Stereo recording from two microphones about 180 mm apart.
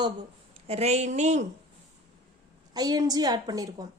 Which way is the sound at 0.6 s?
35° right (ahead or behind).